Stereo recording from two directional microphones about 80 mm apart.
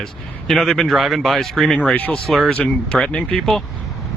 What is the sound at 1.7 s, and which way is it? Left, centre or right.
Speech, centre.